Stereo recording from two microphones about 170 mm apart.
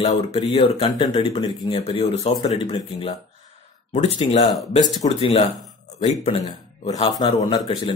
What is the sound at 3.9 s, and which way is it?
Speech, 40° left (ahead or behind).